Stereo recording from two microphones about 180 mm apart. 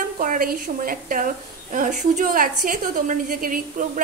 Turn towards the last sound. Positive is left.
turn(degrees=-50)  # may be behind; listen again after turning